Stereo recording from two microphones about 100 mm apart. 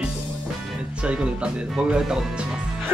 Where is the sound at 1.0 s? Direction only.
10° right (ahead or behind).